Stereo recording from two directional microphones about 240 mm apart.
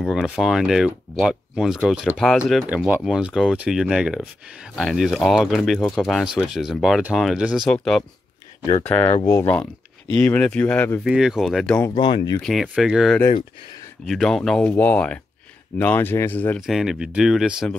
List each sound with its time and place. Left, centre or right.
0.0 s speech: centre
11.9 s speech: centre
12.4 s speech: centre